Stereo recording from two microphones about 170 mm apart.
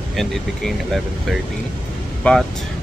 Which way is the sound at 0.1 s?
Centre (ahead or behind).